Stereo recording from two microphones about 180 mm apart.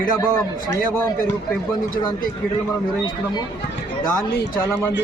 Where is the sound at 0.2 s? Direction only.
15° left (ahead or behind).